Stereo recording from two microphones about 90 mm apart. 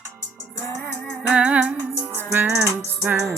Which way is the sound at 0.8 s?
5° right (ahead or behind).